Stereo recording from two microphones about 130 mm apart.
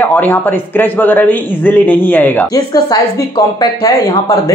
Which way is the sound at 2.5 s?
30° left (ahead or behind).